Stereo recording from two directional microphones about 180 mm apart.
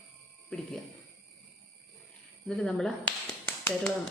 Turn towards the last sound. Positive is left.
turn(degrees=10)  # may be behind; listen again after turning